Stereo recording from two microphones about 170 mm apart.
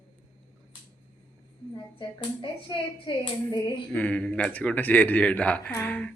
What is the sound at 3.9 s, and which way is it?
Speech, 10° left (ahead or behind).